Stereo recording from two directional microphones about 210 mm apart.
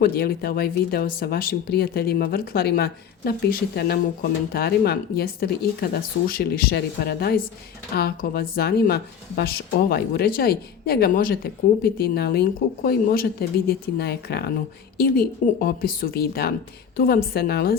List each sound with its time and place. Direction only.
0.0 s speech: 45° left (ahead or behind)